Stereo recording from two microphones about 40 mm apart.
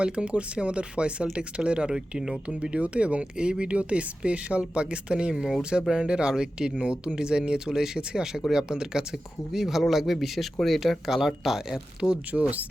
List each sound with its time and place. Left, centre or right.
0.0 s speech: right
2.5 s speech: right
5.3 s speech: centre
5.9 s speech: right
12.3 s speech: right